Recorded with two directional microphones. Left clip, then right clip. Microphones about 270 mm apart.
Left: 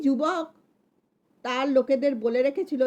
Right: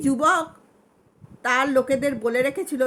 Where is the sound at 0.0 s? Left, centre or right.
Centre.